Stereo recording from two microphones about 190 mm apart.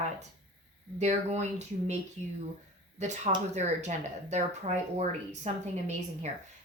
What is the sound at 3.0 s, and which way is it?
A woman's voice, 40° right (ahead or behind).